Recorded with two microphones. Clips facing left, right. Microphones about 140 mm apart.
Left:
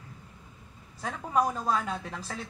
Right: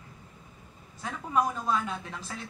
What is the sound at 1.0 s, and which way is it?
Speech, 35° left (ahead or behind).